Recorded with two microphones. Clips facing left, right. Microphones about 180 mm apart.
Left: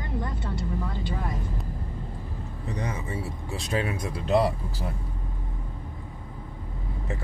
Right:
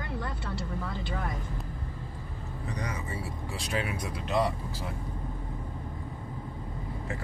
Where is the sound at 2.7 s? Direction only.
25° left (ahead or behind).